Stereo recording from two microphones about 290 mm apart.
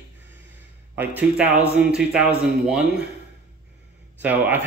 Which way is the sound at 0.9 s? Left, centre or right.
Centre.